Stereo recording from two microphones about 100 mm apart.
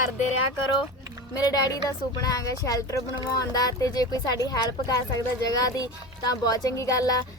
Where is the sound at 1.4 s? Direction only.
40° left (ahead or behind).